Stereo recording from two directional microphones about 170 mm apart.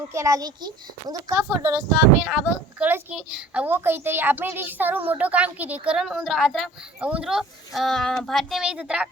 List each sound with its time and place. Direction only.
0.1 s a child's voice: 20° right (ahead or behind)
2.2 s a child's voice: 5° right (ahead or behind)